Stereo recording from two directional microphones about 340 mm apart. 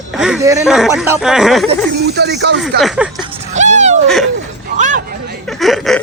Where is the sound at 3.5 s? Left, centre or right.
Right.